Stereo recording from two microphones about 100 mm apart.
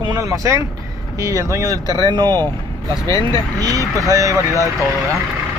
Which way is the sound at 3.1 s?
40° left (ahead or behind).